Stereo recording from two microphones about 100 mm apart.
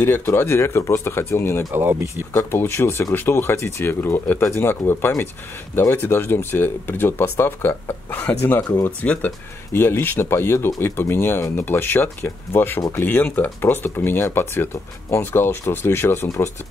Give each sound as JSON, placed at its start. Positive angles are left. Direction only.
{"t": 0.0, "sound": "speech", "side_deg": 20}
{"t": 1.7, "sound": "speech", "side_deg": -25}
{"t": 2.3, "sound": "speech", "side_deg": 25}